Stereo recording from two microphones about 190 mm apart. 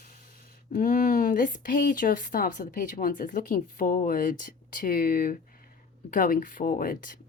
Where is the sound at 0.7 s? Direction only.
45° left (ahead or behind).